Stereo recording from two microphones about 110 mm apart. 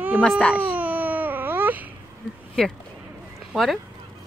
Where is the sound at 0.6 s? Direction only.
15° right (ahead or behind).